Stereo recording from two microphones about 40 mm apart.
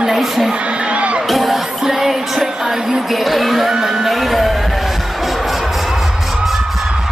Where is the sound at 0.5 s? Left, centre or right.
Right.